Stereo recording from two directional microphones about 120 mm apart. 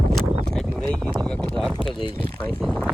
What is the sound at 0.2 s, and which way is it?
Horse, 5° left (ahead or behind).